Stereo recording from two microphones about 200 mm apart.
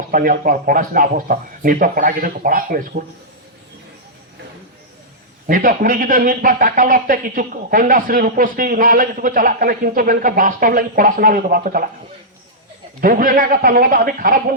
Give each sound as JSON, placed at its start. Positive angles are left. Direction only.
{"t": 0.1, "sound": "speech", "side_deg": -45}
{"t": 5.5, "sound": "speech", "side_deg": -45}
{"t": 13.0, "sound": "speech", "side_deg": -45}